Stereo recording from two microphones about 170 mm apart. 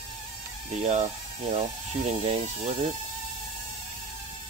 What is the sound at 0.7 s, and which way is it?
Speech, 40° right (ahead or behind).